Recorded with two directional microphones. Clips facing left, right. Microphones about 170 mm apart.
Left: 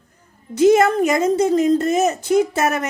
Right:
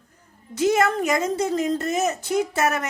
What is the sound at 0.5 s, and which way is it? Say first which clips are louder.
Speech: left 7 dB; 20° left (ahead or behind).